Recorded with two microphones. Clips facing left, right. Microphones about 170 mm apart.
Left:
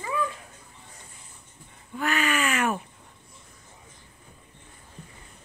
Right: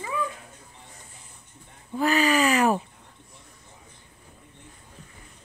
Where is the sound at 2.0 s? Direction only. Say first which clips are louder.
Right 5 dB; 35° right (ahead or behind).